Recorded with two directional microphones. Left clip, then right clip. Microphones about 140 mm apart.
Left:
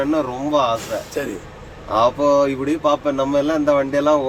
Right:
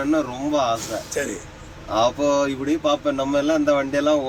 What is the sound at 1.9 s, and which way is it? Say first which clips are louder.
A man's voice: left 4 dB; 15° left (ahead or behind).